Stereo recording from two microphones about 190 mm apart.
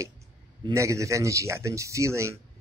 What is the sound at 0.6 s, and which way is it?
Speech, 20° right (ahead or behind).